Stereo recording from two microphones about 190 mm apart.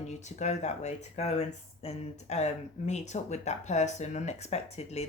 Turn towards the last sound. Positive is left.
turn(degrees=35)  # may be behind; listen again after turning